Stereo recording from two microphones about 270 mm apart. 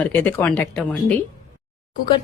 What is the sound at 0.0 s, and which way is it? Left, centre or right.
Speech, centre.